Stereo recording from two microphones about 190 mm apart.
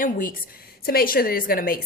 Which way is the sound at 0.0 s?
50° left (ahead or behind).